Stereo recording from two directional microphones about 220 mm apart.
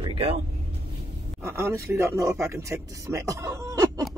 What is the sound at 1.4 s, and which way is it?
Speech, 10° right (ahead or behind).